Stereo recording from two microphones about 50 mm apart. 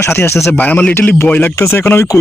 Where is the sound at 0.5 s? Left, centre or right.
Left.